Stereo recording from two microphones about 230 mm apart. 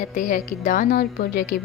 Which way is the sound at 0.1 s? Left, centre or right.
Left.